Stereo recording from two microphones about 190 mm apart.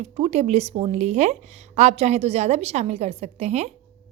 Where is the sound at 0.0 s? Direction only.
35° right (ahead or behind).